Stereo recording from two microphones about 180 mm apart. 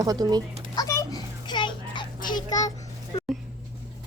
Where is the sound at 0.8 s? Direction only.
20° left (ahead or behind).